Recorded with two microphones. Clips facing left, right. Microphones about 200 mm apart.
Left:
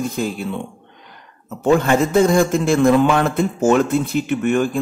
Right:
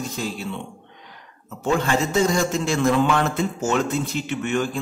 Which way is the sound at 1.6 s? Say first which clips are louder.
Left 6 dB; 55° left (ahead or behind).